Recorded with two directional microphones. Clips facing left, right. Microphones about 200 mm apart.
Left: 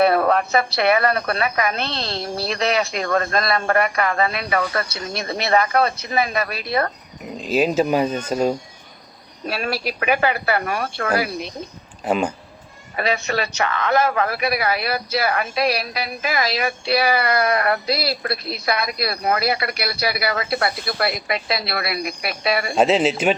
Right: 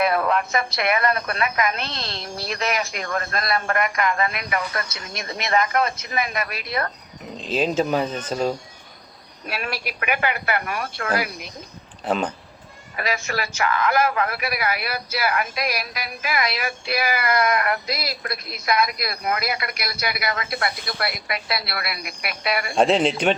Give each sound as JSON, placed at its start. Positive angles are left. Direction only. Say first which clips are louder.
{"t": 0.0, "sound": "a woman's voice", "louder": "left 4 dB", "side_deg": 35}
{"t": 3.0, "sound": "speech", "louder": "left 6 dB", "side_deg": 90}
{"t": 3.3, "sound": "a woman's voice", "louder": "left 4 dB", "side_deg": 30}
{"t": 7.3, "sound": "speech", "louder": "left 3 dB", "side_deg": 10}
{"t": 9.5, "sound": "a woman's voice", "louder": "left 5 dB", "side_deg": 35}
{"t": 12.0, "sound": "speech", "louder": "left 3 dB", "side_deg": 10}
{"t": 13.0, "sound": "a woman's voice", "louder": "left 4 dB", "side_deg": 35}
{"t": 22.7, "sound": "speech", "louder": "left 1 dB", "side_deg": 5}